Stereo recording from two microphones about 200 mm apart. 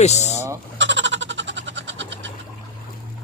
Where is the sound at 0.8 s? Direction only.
65° right (ahead or behind).